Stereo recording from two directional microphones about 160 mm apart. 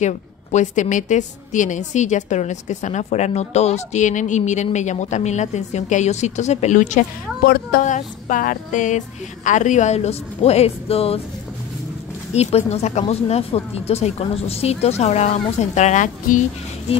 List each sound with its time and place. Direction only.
0.0 s a woman's voice: 50° left (ahead or behind)
12.4 s speech: 40° left (ahead or behind)